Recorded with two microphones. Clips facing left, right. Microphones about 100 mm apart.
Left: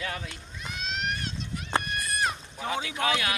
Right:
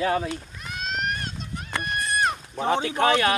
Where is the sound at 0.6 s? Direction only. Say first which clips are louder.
Even; 45° right (ahead or behind).